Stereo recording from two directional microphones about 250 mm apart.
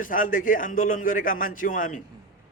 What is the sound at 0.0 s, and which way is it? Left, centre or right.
A man's voice, left.